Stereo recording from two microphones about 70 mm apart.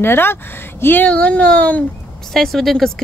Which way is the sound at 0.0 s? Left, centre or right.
Left.